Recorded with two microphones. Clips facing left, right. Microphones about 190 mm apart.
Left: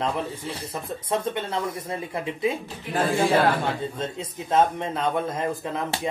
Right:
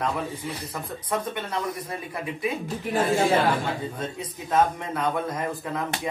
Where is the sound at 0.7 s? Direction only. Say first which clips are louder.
Left 3 dB; 25° left (ahead or behind).